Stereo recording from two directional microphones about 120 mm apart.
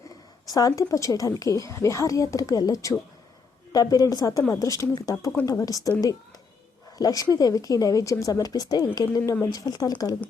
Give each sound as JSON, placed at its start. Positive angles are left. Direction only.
{"t": 0.4, "sound": "a woman's voice", "side_deg": 30}
{"t": 7.0, "sound": "speech", "side_deg": 30}